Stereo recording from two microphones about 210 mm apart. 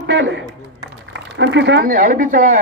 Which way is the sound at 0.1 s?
60° right (ahead or behind).